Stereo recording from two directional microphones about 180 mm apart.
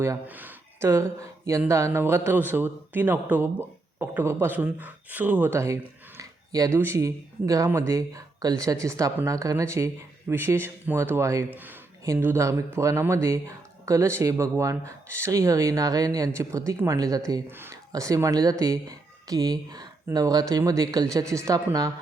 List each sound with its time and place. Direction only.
0.0 s speech: 10° right (ahead or behind)